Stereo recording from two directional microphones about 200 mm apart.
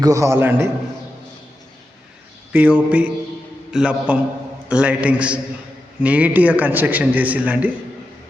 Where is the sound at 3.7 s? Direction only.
5° right (ahead or behind).